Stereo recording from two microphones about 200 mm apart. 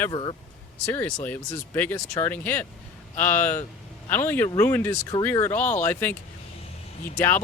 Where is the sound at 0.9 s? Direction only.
10° left (ahead or behind).